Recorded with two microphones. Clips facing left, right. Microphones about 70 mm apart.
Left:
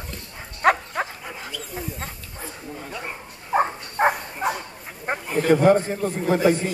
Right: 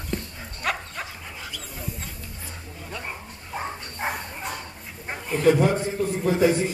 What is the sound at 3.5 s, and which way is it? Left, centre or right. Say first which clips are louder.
Dog: left 10 dB; left.